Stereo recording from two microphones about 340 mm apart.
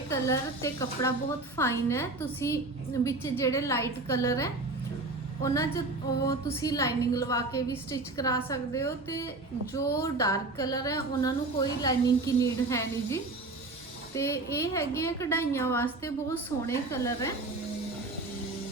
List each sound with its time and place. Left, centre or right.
0.1 s a woman's voice: centre